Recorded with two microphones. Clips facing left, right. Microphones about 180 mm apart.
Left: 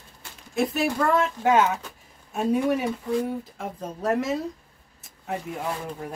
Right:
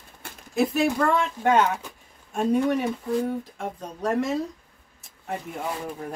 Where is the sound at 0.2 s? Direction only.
55° right (ahead or behind).